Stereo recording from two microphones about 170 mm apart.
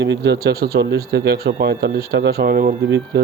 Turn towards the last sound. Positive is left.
turn(degrees=-65)  # may be behind; listen again after turning